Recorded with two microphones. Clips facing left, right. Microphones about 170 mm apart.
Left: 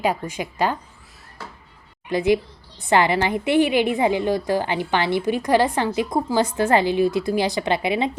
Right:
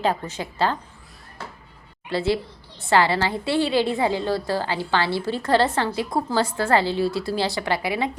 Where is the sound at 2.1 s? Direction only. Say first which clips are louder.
Left 4 dB; 15° left (ahead or behind).